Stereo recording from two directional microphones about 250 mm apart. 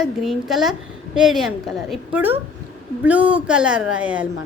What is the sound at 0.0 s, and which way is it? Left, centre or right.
A woman's voice, centre.